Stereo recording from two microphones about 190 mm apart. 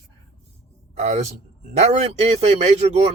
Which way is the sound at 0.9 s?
35° right (ahead or behind).